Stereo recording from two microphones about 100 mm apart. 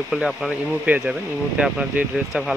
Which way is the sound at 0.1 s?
Centre (ahead or behind).